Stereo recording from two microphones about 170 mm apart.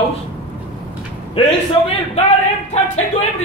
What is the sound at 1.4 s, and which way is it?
Speech, 35° left (ahead or behind).